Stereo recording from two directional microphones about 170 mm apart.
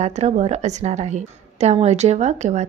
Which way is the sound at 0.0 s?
40° right (ahead or behind).